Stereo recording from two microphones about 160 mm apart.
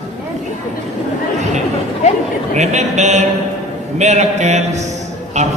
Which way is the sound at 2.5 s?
45° right (ahead or behind).